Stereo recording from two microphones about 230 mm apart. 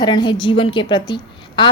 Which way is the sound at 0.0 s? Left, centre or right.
Centre.